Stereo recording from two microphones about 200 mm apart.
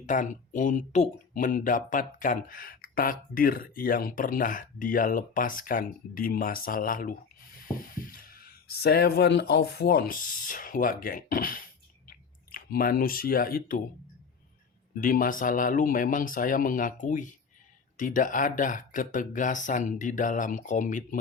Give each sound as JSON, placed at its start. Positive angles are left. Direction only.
{"t": 0.0, "sound": "speech", "side_deg": 40}
{"t": 14.9, "sound": "speech", "side_deg": 45}